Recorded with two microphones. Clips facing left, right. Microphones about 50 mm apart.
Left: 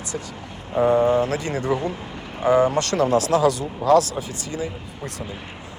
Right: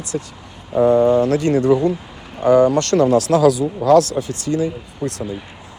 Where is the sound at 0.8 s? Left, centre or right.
Left.